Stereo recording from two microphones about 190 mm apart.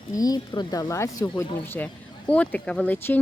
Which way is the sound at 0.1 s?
20° left (ahead or behind).